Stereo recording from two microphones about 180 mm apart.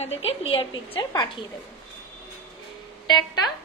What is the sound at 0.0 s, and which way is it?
A woman's voice, 35° left (ahead or behind).